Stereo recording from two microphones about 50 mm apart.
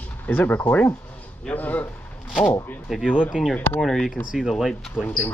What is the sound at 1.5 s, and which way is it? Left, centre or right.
Speech, left.